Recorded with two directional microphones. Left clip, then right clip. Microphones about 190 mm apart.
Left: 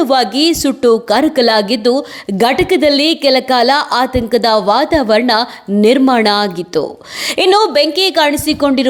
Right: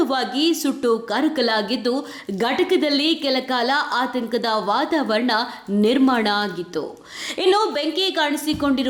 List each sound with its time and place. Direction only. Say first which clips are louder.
0.0 s a woman's voice: left 9 dB; 40° left (ahead or behind)